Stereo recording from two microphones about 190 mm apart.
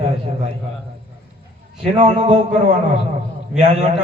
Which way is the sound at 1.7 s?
30° right (ahead or behind).